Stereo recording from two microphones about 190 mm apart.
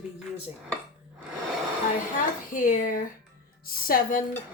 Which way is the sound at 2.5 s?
45° left (ahead or behind).